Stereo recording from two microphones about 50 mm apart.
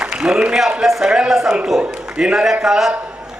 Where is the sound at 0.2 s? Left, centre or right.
Centre.